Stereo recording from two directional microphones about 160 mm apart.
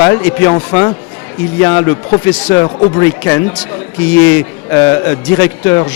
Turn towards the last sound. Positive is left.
turn(degrees=10)  # may be behind; listen again after turning